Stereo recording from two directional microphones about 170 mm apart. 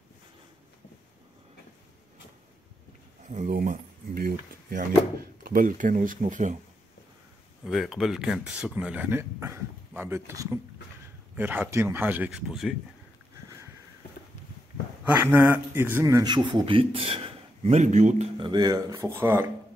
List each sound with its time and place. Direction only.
3.3 s speech: 45° right (ahead or behind)
3.5 s speech: 60° right (ahead or behind)
7.6 s speech: centre (ahead or behind)
15.3 s a man's voice: 10° right (ahead or behind); by 18.2 s 45° right (ahead or behind)
18.4 s speech: 25° right (ahead or behind)